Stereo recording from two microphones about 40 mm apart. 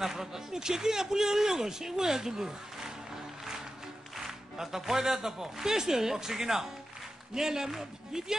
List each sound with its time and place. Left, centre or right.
0.0 s speech: centre
4.3 s speech: centre